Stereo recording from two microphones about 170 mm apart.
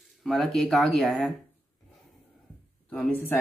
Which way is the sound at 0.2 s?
Centre (ahead or behind).